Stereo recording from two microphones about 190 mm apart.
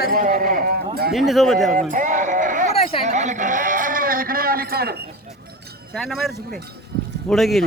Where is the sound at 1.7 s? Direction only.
45° right (ahead or behind).